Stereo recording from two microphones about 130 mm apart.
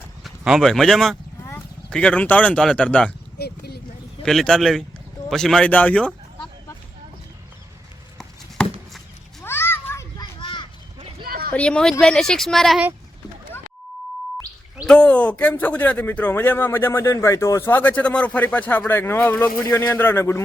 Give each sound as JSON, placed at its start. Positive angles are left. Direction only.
{"t": 0.3, "sound": "speech", "side_deg": 0}
{"t": 1.4, "sound": "a sound", "side_deg": 20}
{"t": 1.9, "sound": "speech", "side_deg": 10}
{"t": 4.2, "sound": "speech", "side_deg": 5}
{"t": 8.2, "sound": "a sound", "side_deg": 5}
{"t": 9.4, "sound": "children playing", "side_deg": 15}
{"t": 10.4, "sound": "a sound", "side_deg": 40}
{"t": 11.5, "sound": "speech", "side_deg": 10}
{"t": 14.8, "sound": "a man's voice", "side_deg": 10}